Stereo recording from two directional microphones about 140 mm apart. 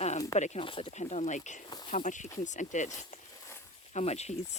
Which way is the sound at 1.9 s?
60° left (ahead or behind).